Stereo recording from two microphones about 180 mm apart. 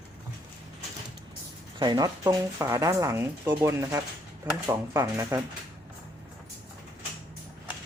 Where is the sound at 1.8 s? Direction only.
20° right (ahead or behind).